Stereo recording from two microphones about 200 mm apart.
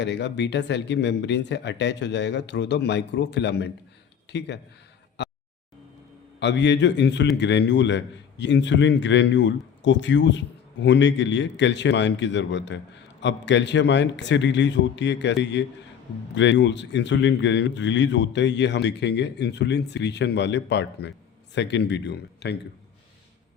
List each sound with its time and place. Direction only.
0.0 s a man's voice: 60° left (ahead or behind)
5.2 s a sound: 60° left (ahead or behind)
6.4 s a man's voice: 60° left (ahead or behind)